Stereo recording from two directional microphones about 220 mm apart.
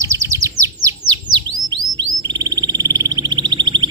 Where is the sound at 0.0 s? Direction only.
15° right (ahead or behind).